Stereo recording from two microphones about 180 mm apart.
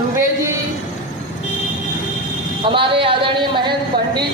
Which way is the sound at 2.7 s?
30° right (ahead or behind).